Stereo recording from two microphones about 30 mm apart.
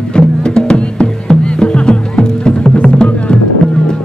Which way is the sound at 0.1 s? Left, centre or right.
Left.